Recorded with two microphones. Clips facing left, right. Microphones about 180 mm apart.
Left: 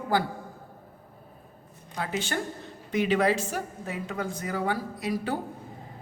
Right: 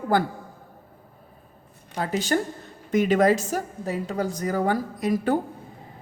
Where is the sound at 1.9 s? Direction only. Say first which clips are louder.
Right 6 dB; 40° right (ahead or behind).